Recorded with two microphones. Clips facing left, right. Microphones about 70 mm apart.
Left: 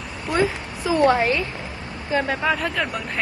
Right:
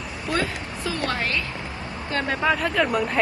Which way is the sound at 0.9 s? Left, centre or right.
Left.